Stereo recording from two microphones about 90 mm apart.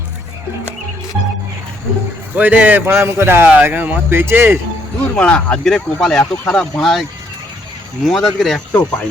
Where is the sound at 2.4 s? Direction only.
20° right (ahead or behind).